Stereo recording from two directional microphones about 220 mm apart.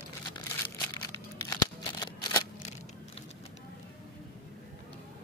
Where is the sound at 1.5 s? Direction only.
20° left (ahead or behind).